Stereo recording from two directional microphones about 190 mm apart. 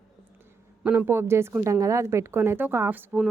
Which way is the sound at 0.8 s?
10° right (ahead or behind).